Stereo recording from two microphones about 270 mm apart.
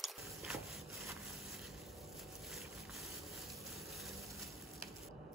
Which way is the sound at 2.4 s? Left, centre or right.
Centre.